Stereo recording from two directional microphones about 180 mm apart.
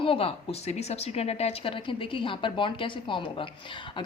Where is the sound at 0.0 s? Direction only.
30° left (ahead or behind).